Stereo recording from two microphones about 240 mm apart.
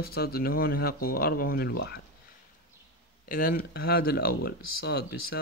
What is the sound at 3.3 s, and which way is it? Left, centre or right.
Speech, left.